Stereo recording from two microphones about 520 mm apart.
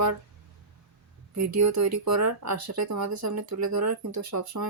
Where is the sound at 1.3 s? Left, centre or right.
Right.